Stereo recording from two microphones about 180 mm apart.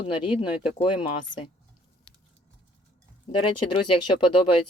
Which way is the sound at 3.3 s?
30° left (ahead or behind).